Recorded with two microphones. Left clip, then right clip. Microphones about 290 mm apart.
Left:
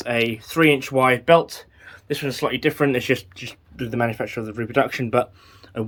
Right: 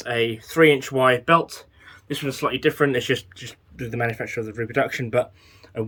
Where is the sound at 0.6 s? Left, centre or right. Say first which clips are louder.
Right 1 dB; left.